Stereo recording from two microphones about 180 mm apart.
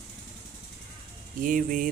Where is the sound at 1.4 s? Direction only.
50° right (ahead or behind).